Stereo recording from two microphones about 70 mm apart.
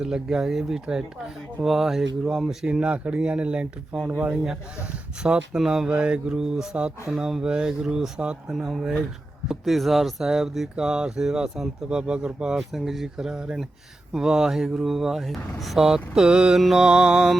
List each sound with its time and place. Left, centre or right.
0.0 s speech: centre
2.7 s speech: centre
5.2 s speech: centre